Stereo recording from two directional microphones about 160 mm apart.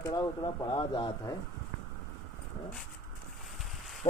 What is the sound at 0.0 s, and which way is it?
Speech, 25° left (ahead or behind).